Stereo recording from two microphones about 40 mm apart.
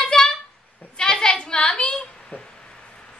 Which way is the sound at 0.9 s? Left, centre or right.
Left.